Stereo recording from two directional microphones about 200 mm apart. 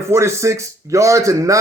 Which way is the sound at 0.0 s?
15° right (ahead or behind).